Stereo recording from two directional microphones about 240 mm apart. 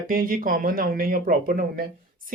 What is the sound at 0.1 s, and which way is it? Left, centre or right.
Speech, right.